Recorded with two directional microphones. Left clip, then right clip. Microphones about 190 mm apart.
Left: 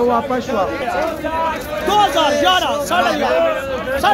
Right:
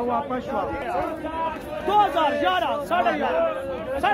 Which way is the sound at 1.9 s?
10° right (ahead or behind).